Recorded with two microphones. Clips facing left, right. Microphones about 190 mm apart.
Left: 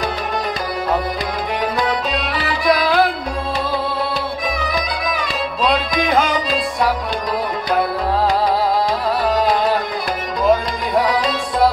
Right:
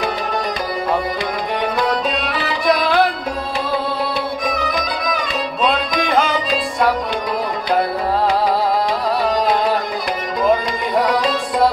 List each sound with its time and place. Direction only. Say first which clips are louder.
1.9 s music: right 1 dB; centre (ahead or behind)
4.5 s music: right 1 dB; centre (ahead or behind)
9.2 s music: left 1 dB; centre (ahead or behind)